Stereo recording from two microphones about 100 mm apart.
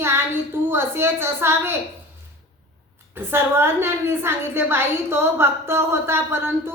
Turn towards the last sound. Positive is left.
turn(degrees=-25)  # may be behind; listen again after turning